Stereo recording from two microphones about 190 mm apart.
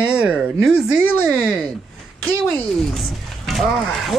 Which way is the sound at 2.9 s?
Centre (ahead or behind).